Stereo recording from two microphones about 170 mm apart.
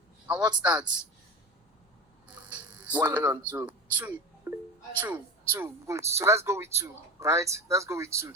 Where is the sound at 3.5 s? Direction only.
10° right (ahead or behind).